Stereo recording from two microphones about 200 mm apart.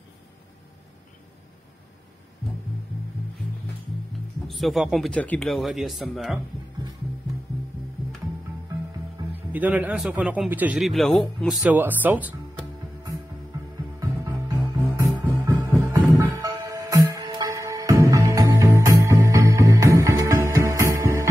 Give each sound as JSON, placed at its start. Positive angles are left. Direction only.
{"t": 4.5, "sound": "a man's voice", "side_deg": 0}
{"t": 9.3, "sound": "a man's voice", "side_deg": -10}
{"t": 13.9, "sound": "music", "side_deg": -15}
{"t": 16.0, "sound": "music", "side_deg": 0}
{"t": 16.3, "sound": "music", "side_deg": -15}